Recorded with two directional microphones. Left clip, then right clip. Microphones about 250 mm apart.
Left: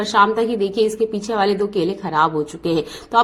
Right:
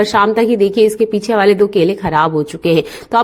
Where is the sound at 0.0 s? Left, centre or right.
Right.